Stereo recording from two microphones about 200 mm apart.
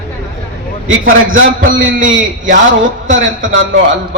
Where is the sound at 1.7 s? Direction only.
75° right (ahead or behind).